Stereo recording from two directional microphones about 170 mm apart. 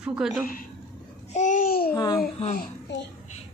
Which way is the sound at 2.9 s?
90° left.